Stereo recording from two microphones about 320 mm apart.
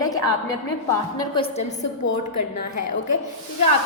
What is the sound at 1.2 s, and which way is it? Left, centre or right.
Speech, centre.